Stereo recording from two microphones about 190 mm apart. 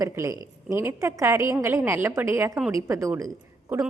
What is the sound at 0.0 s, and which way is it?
A woman's voice, 15° right (ahead or behind).